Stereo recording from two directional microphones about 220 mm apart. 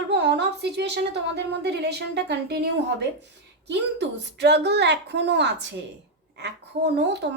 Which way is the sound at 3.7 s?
50° right (ahead or behind).